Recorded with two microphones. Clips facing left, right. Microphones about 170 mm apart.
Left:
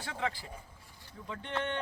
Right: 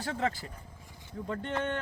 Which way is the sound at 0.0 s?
40° right (ahead or behind).